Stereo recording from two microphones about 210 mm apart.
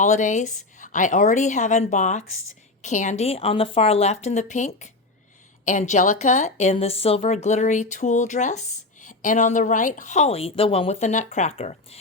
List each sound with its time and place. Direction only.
0.0 s a woman's voice: 35° left (ahead or behind)